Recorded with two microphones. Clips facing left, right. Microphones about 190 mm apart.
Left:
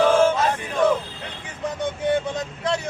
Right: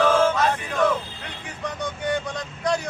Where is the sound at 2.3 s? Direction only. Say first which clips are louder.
Left 1 dB; 5° left (ahead or behind).